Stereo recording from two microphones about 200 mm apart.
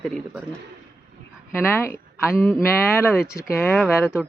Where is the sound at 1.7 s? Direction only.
10° left (ahead or behind).